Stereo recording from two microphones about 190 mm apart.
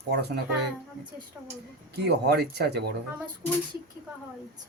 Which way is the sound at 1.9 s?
60° right (ahead or behind).